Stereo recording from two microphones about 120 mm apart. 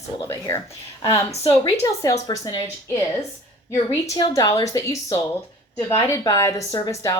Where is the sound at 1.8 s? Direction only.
25° left (ahead or behind).